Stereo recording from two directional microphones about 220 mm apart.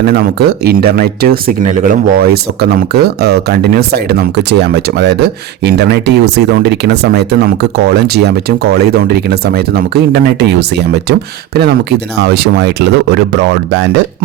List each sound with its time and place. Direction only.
0.0 s speech: 45° right (ahead or behind)